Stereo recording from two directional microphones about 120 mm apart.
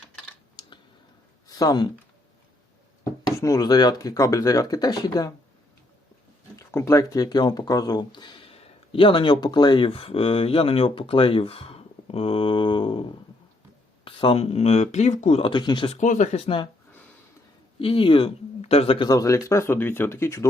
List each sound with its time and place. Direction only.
0.6 s a sound: 40° left (ahead or behind)
1.5 s speech: 30° left (ahead or behind)
3.0 s speech: 30° left (ahead or behind)
6.6 s speech: 20° left (ahead or behind); by 15.4 s 75° left (ahead or behind)
15.4 s speech: 45° left (ahead or behind)
15.9 s speech: 90° left; by 16.6 s 60° left (ahead or behind)
17.7 s speech: 50° left (ahead or behind)
18.6 s a man's voice: 55° left (ahead or behind)
19.0 s speech: 30° left (ahead or behind)